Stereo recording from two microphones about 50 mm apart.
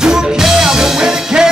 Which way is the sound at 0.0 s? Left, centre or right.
Centre.